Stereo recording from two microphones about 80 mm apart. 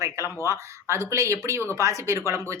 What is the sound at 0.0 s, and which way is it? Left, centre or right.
A woman's voice, right.